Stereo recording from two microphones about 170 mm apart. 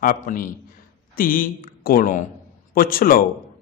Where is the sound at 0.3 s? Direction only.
50° left (ahead or behind).